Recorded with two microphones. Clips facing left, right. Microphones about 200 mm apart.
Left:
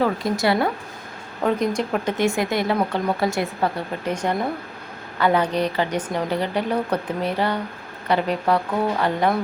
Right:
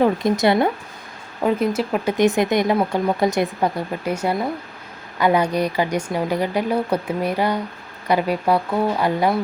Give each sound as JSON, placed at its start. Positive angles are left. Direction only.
{"t": 0.0, "sound": "speech", "side_deg": -20}
{"t": 1.4, "sound": "speech", "side_deg": -5}
{"t": 2.1, "sound": "speech", "side_deg": -20}